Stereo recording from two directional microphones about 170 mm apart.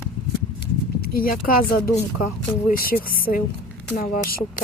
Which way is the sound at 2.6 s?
60° left (ahead or behind).